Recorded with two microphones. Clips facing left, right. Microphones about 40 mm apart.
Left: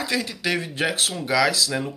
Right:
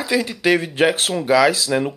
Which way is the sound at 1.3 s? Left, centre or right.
Centre.